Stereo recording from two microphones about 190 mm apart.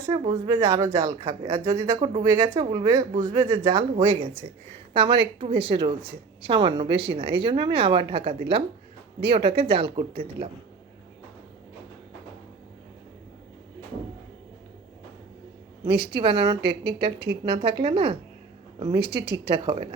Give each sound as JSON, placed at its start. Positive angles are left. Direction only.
{"t": 0.1, "sound": "speech", "side_deg": -20}
{"t": 3.9, "sound": "speech", "side_deg": -30}
{"t": 16.0, "sound": "speech", "side_deg": -25}
{"t": 16.6, "sound": "a woman's voice", "side_deg": -60}
{"t": 17.5, "sound": "speech", "side_deg": -25}
{"t": 19.0, "sound": "a woman's voice", "side_deg": -55}
{"t": 19.5, "sound": "speech", "side_deg": -25}